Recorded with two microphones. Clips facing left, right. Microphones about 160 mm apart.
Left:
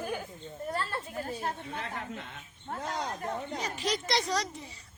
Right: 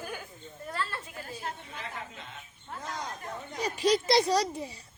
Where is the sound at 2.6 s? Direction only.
35° left (ahead or behind).